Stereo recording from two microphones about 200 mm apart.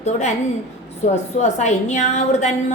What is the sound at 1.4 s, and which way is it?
A woman's voice, 35° left (ahead or behind).